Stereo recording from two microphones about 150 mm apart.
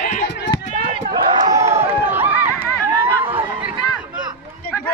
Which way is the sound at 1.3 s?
25° right (ahead or behind).